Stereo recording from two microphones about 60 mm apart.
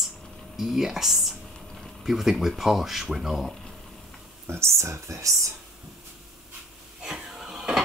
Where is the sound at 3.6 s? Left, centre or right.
Centre.